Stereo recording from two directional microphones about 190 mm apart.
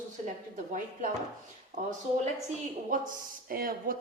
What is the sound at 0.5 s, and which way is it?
Speech, 40° right (ahead or behind).